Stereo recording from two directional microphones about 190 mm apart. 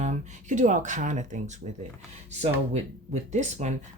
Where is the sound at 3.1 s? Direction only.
40° right (ahead or behind).